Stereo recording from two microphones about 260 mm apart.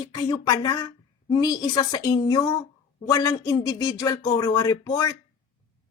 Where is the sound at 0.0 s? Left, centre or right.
Centre.